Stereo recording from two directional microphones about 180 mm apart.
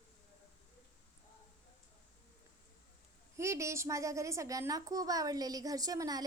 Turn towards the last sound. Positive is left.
turn(degrees=-20)  # may be behind; listen again after turning